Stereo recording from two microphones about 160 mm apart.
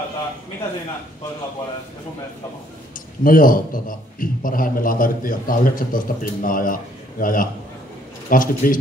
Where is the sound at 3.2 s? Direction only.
60° left (ahead or behind).